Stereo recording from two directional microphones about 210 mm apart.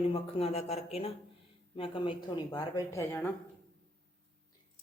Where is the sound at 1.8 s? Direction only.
25° left (ahead or behind).